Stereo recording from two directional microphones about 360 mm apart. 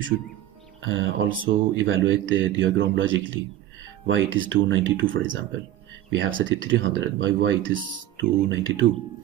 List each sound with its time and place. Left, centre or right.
0.8 s a man's voice: right